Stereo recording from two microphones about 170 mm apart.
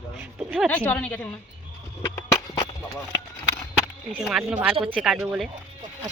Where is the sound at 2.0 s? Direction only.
15° left (ahead or behind).